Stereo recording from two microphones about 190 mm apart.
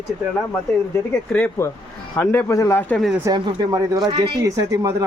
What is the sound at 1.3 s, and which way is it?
Speech, 10° left (ahead or behind).